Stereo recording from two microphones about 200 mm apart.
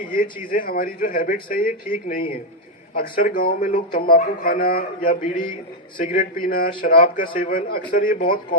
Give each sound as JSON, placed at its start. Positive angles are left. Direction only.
{"t": 0.1, "sound": "speech", "side_deg": 45}